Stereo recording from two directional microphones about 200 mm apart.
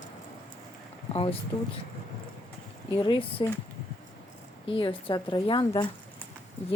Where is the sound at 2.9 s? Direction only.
20° left (ahead or behind).